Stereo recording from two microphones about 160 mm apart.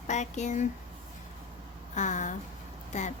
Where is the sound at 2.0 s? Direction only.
50° left (ahead or behind).